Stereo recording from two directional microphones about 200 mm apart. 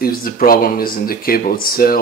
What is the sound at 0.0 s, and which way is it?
Speech, 45° left (ahead or behind).